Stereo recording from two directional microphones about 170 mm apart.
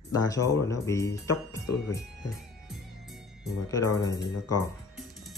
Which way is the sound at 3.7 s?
20° left (ahead or behind).